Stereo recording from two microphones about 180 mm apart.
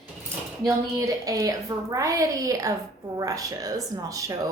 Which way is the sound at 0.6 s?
20° right (ahead or behind).